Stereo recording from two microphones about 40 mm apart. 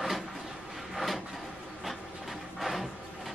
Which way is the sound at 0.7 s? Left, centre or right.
Centre.